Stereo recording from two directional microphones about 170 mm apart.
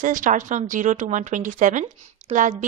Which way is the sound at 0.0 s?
50° right (ahead or behind).